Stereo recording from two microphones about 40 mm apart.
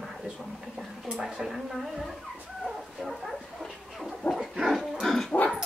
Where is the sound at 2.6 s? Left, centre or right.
Centre.